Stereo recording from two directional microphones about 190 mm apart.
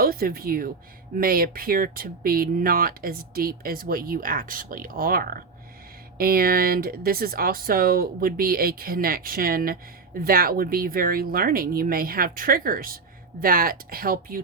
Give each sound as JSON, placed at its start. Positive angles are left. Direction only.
{"t": 0.0, "sound": "speech", "side_deg": -50}